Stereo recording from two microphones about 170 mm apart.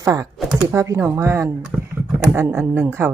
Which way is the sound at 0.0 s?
20° right (ahead or behind).